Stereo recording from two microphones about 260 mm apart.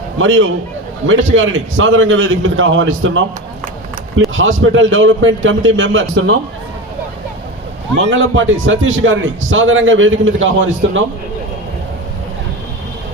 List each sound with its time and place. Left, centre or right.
0.2 s a man's voice: right
4.4 s a man's voice: right
7.9 s a man's voice: right